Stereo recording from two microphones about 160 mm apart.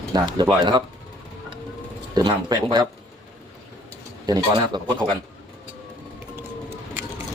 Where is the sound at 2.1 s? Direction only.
25° right (ahead or behind).